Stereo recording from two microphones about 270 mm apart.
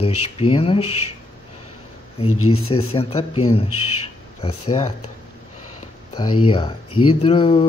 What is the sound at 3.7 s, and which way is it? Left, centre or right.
Speech, left.